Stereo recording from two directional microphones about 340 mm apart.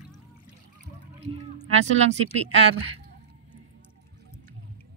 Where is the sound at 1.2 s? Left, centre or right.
Centre.